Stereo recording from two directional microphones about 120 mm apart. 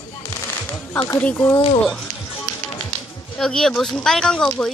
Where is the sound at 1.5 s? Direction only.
45° left (ahead or behind).